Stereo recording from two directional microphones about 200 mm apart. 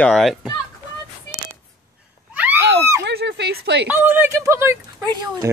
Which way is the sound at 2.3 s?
10° right (ahead or behind).